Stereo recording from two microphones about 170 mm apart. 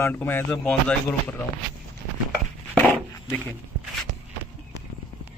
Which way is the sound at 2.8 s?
10° left (ahead or behind).